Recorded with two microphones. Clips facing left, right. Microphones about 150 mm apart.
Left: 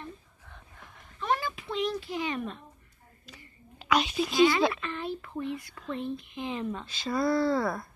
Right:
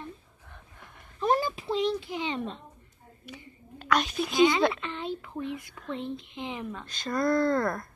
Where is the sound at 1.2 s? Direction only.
35° right (ahead or behind).